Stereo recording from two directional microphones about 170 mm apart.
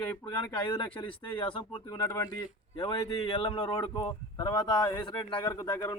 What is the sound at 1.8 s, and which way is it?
Speech, 20° left (ahead or behind).